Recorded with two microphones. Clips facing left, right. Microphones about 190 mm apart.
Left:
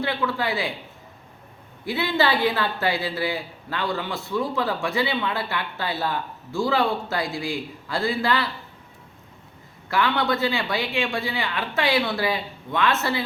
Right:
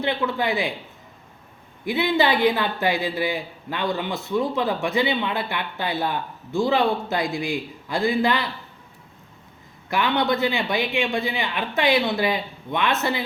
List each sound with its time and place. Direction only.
0.0 s speech: 20° right (ahead or behind)
1.8 s speech: 20° right (ahead or behind)
9.9 s speech: 20° right (ahead or behind)